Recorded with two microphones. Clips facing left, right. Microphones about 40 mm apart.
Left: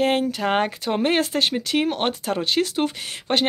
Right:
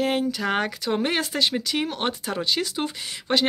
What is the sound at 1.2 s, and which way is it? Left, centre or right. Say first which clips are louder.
Speech: left 2 dB; left.